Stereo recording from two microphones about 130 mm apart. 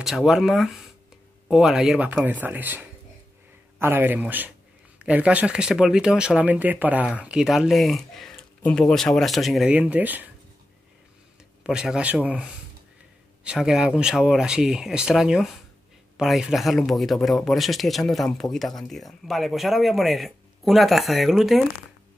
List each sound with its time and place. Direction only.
0.0 s speech: centre (ahead or behind)
9.7 s speech: 10° right (ahead or behind)
11.6 s speech: 5° right (ahead or behind)